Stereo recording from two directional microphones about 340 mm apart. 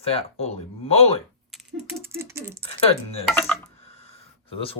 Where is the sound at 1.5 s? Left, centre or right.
Centre.